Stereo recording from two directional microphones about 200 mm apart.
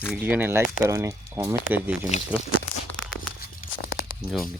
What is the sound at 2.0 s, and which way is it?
Speech, 35° left (ahead or behind).